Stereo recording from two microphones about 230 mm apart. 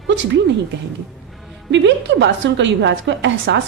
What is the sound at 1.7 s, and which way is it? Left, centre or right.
A woman's voice, right.